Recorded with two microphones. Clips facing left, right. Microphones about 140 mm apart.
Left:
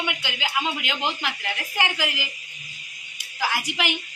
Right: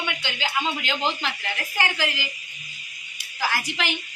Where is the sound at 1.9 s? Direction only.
15° left (ahead or behind).